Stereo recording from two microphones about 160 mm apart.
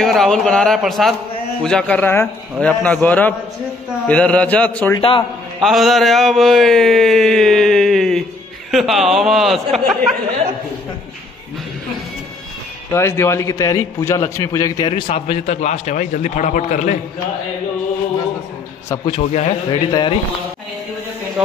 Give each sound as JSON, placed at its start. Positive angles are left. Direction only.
{"t": 0.0, "sound": "a sound", "side_deg": 0}
{"t": 1.6, "sound": "speech", "side_deg": 5}
{"t": 4.9, "sound": "a man's voice", "side_deg": 30}
{"t": 5.6, "sound": "a sound", "side_deg": 0}
{"t": 12.9, "sound": "a man's voice", "side_deg": 15}
{"t": 19.0, "sound": "a man's voice", "side_deg": 35}